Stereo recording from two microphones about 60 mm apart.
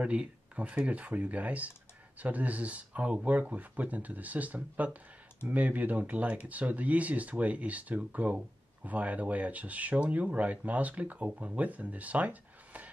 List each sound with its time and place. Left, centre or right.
0.0 s speech: right